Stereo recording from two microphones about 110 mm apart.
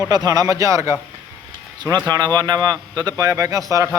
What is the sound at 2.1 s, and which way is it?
A man's voice, 40° right (ahead or behind).